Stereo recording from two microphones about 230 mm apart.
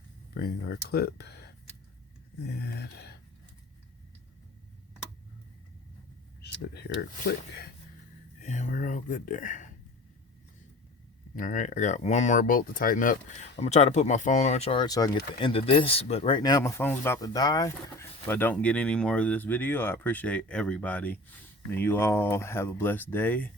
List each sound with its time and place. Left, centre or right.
0.3 s speech: left
2.6 s speech: left
6.4 s speech: left
8.4 s speech: left
11.3 s speech: left; by 23.5 s centre